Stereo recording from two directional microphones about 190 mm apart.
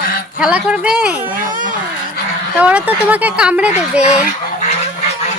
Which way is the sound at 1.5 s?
45° right (ahead or behind).